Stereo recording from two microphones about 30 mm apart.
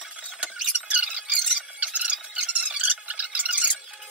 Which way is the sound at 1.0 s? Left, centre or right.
Right.